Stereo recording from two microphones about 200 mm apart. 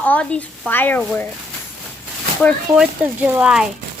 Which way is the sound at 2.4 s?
Centre (ahead or behind).